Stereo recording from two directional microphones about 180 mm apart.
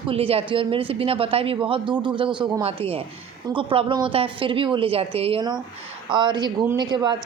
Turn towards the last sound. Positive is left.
turn(degrees=-25)  # may be behind; listen again after turning